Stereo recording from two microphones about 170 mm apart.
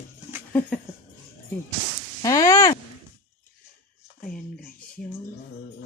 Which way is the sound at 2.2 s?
20° left (ahead or behind).